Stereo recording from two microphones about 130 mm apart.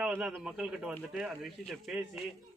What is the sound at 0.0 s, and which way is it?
A man's voice, 5° right (ahead or behind).